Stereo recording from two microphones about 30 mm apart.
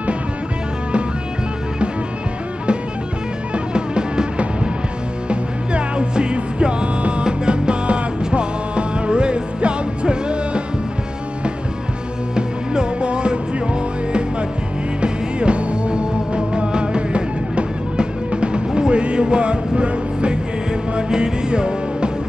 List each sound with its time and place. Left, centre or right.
3.5 s music: right
5.3 s music: right
12.4 s music: right
15.0 s music: right